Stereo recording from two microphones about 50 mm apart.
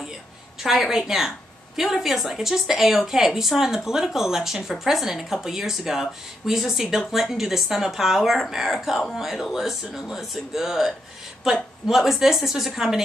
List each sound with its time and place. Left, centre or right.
0.6 s a woman's voice: centre